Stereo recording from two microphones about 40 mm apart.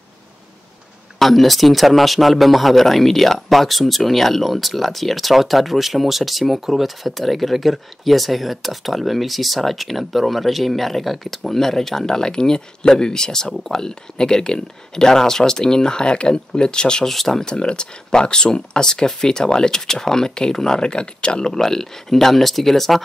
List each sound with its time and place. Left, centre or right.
1.2 s a man's voice: centre
17.1 s a man's voice: centre
17.4 s speech: left
21.5 s a man's voice: centre